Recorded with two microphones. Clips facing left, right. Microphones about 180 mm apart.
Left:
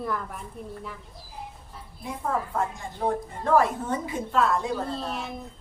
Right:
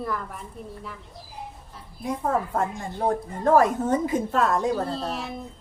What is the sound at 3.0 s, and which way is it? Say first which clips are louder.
A woman's voice: right 4 dB; 40° right (ahead or behind).